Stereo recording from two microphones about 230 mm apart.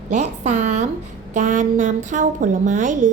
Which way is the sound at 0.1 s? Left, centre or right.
Right.